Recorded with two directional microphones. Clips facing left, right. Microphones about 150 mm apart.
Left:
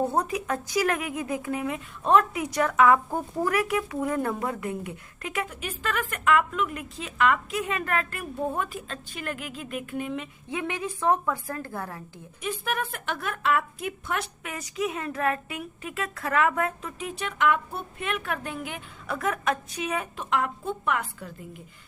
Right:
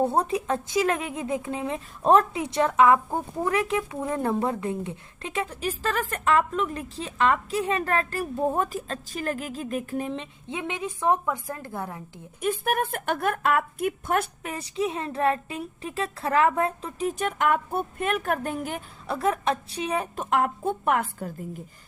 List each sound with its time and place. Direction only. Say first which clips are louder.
0.0 s a woman's voice: right 2 dB; 30° right (ahead or behind)
2.3 s a woman's voice: right 2 dB; 25° right (ahead or behind)
12.4 s a woman's voice: right 5 dB; 50° right (ahead or behind)
14.4 s speech: right 2 dB; 30° right (ahead or behind)
20.3 s a woman's voice: right 3 dB; 50° right (ahead or behind)